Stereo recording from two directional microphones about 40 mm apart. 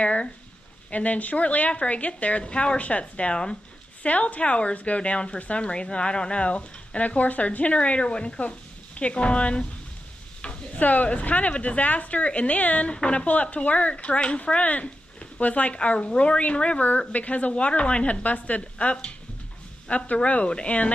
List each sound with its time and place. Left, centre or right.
0.0 s speech: left
4.0 s speech: left